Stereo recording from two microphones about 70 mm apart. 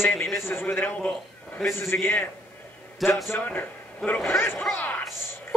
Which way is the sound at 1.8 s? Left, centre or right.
Left.